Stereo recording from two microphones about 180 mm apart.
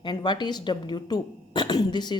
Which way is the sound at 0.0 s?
25° left (ahead or behind).